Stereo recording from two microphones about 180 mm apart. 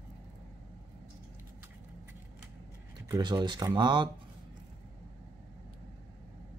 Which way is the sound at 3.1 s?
25° right (ahead or behind).